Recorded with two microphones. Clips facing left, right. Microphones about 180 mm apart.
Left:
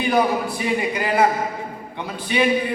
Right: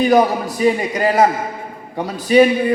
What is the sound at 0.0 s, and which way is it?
A man's voice, 40° right (ahead or behind).